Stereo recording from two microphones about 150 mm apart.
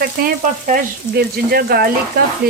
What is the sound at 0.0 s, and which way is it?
Frying, 80° right.